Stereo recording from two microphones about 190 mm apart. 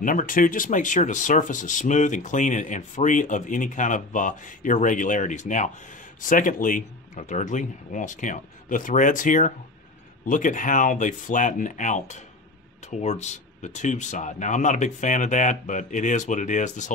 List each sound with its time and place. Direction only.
0.0 s speech: 45° left (ahead or behind)